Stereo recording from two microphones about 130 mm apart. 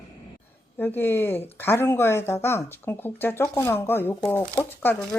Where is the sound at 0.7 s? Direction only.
15° left (ahead or behind).